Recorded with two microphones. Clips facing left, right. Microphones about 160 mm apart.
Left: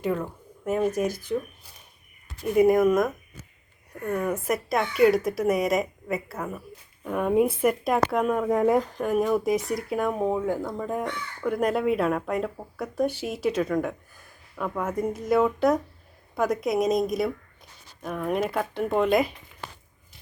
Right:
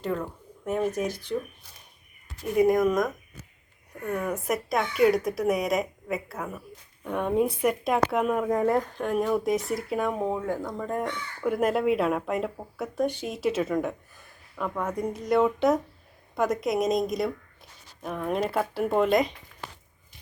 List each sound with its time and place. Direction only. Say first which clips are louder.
0.0 s speech: left 2 dB; 5° left (ahead or behind)
1.0 s speech: left 3 dB; 45° left (ahead or behind)
2.6 s speech: left 3 dB; 5° left (ahead or behind)
8.5 s speech: left 2 dB; 10° left (ahead or behind)